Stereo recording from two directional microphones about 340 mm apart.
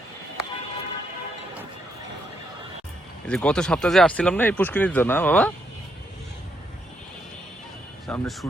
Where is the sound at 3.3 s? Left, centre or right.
Centre.